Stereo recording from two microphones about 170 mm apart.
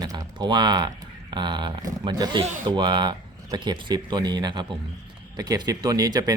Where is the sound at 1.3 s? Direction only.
25° right (ahead or behind).